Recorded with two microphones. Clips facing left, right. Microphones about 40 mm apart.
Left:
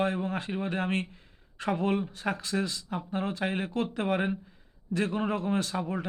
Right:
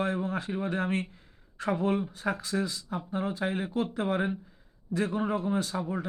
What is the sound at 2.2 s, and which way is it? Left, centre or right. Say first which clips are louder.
Speech: even; left.